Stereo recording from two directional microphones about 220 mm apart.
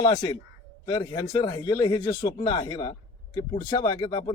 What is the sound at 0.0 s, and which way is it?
Speech, 20° left (ahead or behind).